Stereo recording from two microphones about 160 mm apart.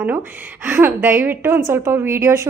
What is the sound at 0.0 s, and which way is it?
A woman's voice, 10° right (ahead or behind).